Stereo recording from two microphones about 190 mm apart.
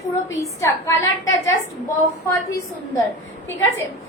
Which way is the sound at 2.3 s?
15° left (ahead or behind).